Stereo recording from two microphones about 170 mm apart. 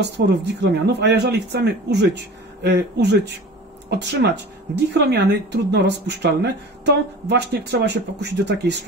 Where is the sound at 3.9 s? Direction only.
90° right.